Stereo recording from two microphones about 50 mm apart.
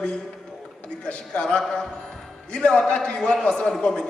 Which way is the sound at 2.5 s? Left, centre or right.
Centre.